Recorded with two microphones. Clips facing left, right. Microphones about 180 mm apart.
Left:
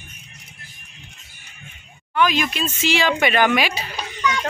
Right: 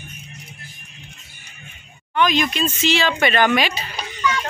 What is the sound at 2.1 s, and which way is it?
Speech, 5° left (ahead or behind).